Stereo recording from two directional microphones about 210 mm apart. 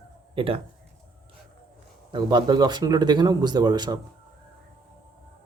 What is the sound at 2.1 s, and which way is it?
Speech, 20° right (ahead or behind).